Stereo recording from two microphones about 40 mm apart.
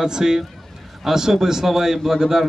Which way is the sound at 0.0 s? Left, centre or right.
Centre.